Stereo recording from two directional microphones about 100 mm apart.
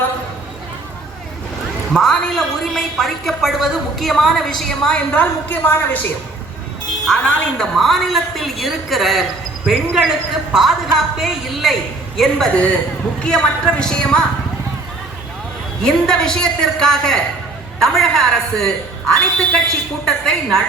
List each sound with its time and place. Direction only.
1.9 s a woman's voice: 5° left (ahead or behind)
5.1 s a woman's voice: 20° left (ahead or behind)
15.8 s a woman's voice: 5° left (ahead or behind)